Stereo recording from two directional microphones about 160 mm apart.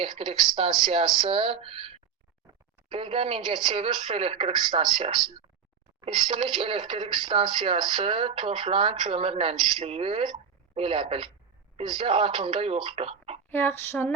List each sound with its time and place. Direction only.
0.0 s speech: 30° right (ahead or behind)
13.5 s speech: 15° left (ahead or behind)